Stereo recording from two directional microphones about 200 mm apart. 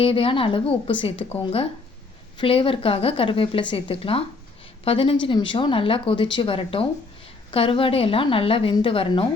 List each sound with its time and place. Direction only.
0.0 s speech: 25° left (ahead or behind)